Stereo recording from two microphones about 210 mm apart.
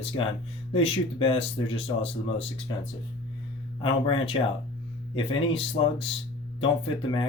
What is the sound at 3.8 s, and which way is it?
Speech, 25° left (ahead or behind).